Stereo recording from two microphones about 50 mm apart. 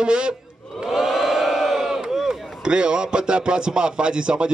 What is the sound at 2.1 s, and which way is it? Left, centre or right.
Chop, centre.